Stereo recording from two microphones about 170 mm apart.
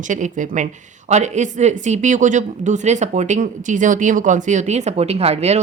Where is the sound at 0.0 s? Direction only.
50° right (ahead or behind).